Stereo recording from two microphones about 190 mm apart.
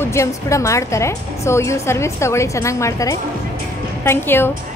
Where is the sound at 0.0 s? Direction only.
15° left (ahead or behind).